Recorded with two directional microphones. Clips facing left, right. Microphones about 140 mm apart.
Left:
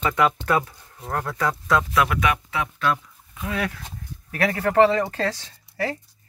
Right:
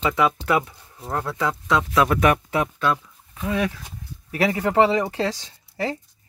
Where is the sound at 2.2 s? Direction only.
45° right (ahead or behind).